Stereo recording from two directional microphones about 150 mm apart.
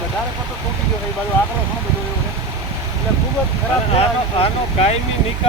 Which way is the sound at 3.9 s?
45° left (ahead or behind).